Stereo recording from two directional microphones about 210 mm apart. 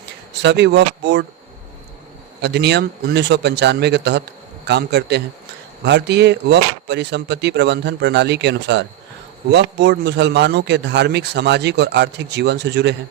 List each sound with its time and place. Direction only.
0.4 s a man's voice: 55° right (ahead or behind)
2.4 s a man's voice: 55° right (ahead or behind)